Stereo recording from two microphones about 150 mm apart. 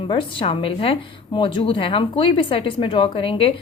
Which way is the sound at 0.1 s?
35° left (ahead or behind).